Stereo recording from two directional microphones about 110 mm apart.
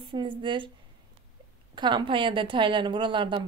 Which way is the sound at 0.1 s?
45° right (ahead or behind).